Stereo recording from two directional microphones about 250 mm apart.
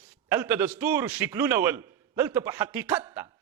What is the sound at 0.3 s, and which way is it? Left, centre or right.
A man's voice, centre.